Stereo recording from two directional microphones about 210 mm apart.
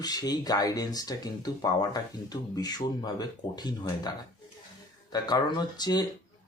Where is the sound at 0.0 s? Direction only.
20° left (ahead or behind).